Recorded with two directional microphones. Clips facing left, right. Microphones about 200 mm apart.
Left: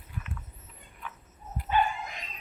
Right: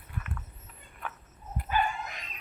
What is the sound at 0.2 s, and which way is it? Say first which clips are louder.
Rodents: right 1 dB; 55° right (ahead or behind).